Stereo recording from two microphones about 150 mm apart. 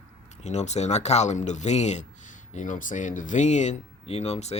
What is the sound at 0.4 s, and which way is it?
Speech, 50° left (ahead or behind).